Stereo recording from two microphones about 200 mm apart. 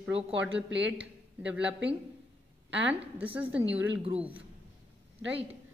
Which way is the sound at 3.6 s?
65° right (ahead or behind).